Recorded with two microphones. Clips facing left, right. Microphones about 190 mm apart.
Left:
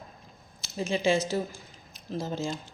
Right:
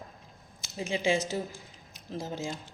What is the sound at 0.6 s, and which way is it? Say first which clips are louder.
Speech: left 3 dB; 15° right (ahead or behind).